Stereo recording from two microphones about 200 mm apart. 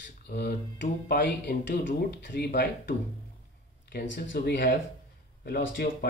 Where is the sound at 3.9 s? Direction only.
55° left (ahead or behind).